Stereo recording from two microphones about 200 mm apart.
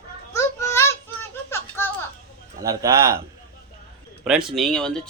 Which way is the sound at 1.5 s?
10° left (ahead or behind).